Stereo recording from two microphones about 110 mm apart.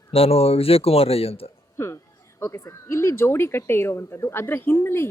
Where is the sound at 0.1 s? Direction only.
60° left (ahead or behind).